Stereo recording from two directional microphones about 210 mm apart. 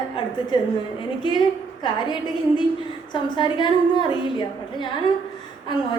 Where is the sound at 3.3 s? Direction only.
20° left (ahead or behind).